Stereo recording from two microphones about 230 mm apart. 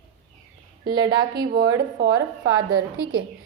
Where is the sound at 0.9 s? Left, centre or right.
Centre.